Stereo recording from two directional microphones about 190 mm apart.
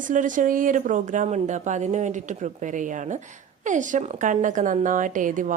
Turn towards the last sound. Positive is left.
turn(degrees=-45)  # may be behind; listen again after turning